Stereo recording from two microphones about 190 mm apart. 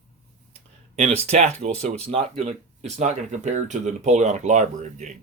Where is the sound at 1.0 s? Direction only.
35° right (ahead or behind).